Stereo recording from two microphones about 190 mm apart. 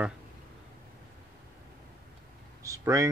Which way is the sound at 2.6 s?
15° right (ahead or behind).